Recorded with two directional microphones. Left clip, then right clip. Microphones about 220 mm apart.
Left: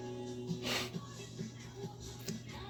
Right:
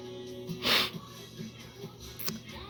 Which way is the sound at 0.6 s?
40° right (ahead or behind).